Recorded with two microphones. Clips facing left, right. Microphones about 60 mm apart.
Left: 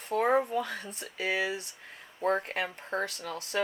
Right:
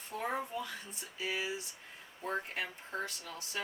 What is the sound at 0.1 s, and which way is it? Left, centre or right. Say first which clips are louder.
Speech: left 11 dB; left.